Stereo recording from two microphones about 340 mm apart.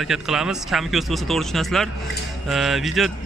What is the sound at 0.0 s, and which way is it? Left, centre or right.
Speech, centre.